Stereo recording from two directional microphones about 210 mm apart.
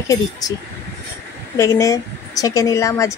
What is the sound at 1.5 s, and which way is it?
A woman's voice, 15° left (ahead or behind).